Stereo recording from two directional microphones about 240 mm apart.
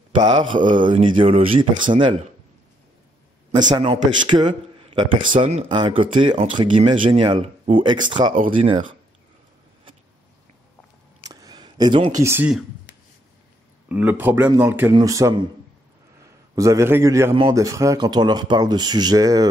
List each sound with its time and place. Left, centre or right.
0.2 s speech: centre
3.7 s speech: centre
11.2 s a sound: centre
12.2 s a man's voice: centre
13.8 s a man's voice: centre
16.5 s a man's voice: centre